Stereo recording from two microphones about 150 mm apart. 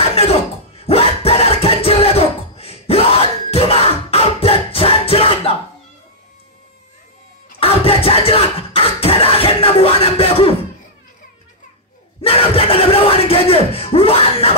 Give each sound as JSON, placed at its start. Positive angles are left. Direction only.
{"t": 0.1, "sound": "music", "side_deg": 40}
{"t": 7.6, "sound": "beatboxing", "side_deg": 40}
{"t": 12.2, "sound": "a sound", "side_deg": 40}